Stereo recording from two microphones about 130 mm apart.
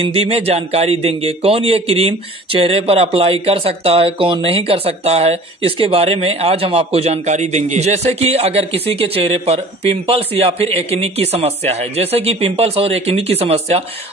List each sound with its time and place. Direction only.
0.0 s speech: 50° right (ahead or behind)